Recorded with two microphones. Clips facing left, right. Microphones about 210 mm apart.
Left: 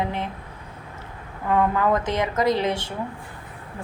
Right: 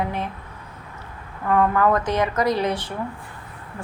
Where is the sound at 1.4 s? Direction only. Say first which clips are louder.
Right 2 dB; 20° left (ahead or behind).